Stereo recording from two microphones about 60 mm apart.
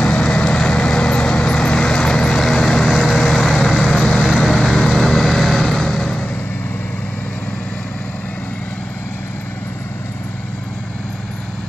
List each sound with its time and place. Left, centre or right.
0.0 s vehicle: left; by 3.9 s centre
4.2 s vehicle: centre
4.5 s vehicle: centre